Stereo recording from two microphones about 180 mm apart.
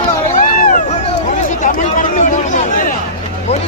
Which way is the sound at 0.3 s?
45° left (ahead or behind).